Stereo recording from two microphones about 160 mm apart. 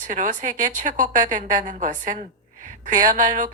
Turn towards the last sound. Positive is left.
turn(degrees=-55)  # may be behind; listen again after turning